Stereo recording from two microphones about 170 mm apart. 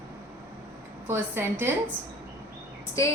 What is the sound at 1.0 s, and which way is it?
Speech, 10° right (ahead or behind).